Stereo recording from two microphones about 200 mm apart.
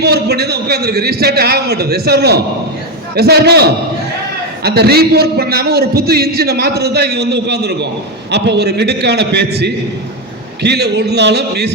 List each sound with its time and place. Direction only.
0.0 s a man's voice: 55° right (ahead or behind)